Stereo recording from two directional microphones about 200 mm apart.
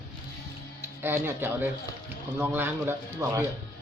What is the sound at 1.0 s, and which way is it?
Speech, 10° right (ahead or behind).